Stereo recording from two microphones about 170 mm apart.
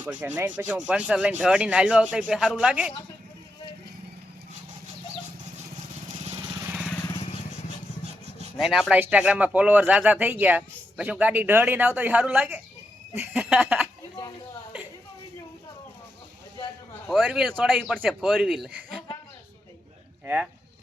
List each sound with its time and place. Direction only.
0.0 s speech: 10° right (ahead or behind)
6.1 s vehicle: 40° right (ahead or behind)
6.6 s vehicle: 10° right (ahead or behind)
8.5 s speech: centre (ahead or behind)
17.1 s speech: centre (ahead or behind)
20.2 s speech: 10° right (ahead or behind)